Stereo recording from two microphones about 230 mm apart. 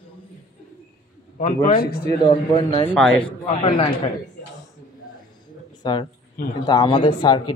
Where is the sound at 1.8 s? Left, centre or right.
Left.